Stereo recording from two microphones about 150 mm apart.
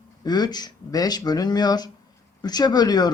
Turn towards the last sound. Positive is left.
turn(degrees=25)  # may be behind; listen again after turning